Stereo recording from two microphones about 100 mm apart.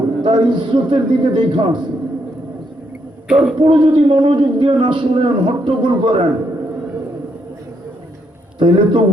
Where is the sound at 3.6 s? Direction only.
60° right (ahead or behind).